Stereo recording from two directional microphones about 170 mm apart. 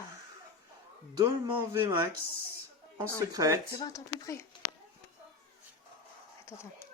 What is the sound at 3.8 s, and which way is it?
Speech, 20° left (ahead or behind).